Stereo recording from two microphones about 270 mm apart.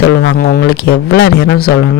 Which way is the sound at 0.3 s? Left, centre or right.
Left.